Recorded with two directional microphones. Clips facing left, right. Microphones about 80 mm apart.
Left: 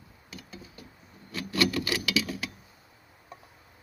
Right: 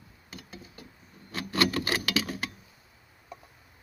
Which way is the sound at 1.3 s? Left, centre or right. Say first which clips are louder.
Even; right.